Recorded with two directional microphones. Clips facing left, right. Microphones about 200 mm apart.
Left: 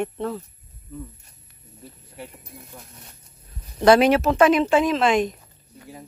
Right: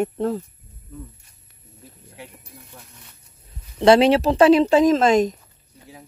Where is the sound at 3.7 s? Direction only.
25° right (ahead or behind); by 5.3 s 40° right (ahead or behind).